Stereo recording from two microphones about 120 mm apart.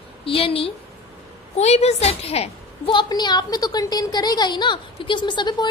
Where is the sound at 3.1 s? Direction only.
35° left (ahead or behind).